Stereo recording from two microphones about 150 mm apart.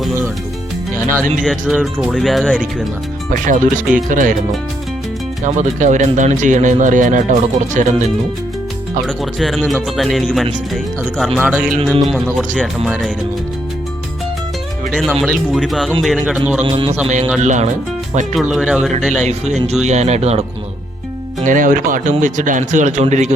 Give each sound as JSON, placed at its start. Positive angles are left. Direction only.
{"t": 1.4, "sound": "speech", "side_deg": 0}
{"t": 3.2, "sound": "speech", "side_deg": -60}
{"t": 5.4, "sound": "speech", "side_deg": -55}
{"t": 9.0, "sound": "speech", "side_deg": 0}
{"t": 12.0, "sound": "speech", "side_deg": 5}
{"t": 14.9, "sound": "speech", "side_deg": 0}
{"t": 16.6, "sound": "music", "side_deg": -35}
{"t": 17.4, "sound": "speech", "side_deg": -55}
{"t": 18.3, "sound": "speech", "side_deg": -5}
{"t": 19.1, "sound": "speech", "side_deg": -50}
{"t": 21.4, "sound": "speech", "side_deg": -65}